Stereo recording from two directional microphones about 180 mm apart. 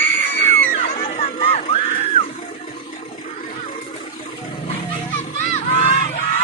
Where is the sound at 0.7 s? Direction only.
35° left (ahead or behind).